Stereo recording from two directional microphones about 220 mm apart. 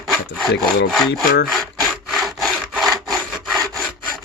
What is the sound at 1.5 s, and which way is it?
Wood, centre (ahead or behind).